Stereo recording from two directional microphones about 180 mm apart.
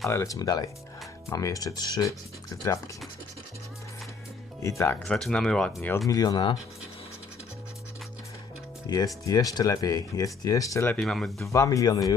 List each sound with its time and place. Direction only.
0.1 s speech: 15° left (ahead or behind)
4.6 s speech: 15° left (ahead or behind)
5.0 s speech: 5° left (ahead or behind); by 6.6 s 25° left (ahead or behind)
8.9 s speech: 20° left (ahead or behind)
11.0 s speech: centre (ahead or behind)
11.5 s speech: 15° left (ahead or behind)